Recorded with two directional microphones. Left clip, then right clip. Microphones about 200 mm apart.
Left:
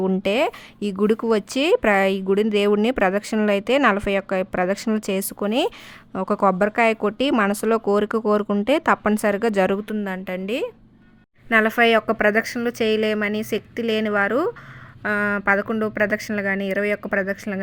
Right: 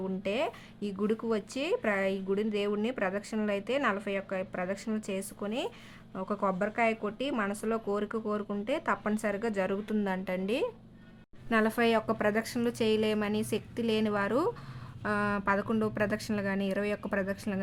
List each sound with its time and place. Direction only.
0.0 s speech: 35° left (ahead or behind)
9.8 s a woman's voice: 20° left (ahead or behind)